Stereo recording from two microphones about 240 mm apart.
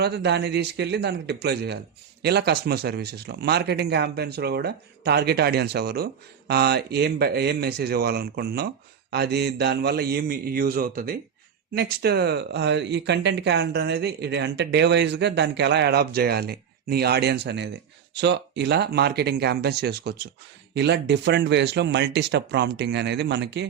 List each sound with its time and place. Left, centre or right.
0.0 s speech: right